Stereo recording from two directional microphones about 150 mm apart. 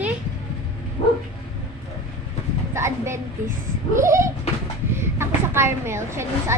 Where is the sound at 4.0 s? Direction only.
20° right (ahead or behind).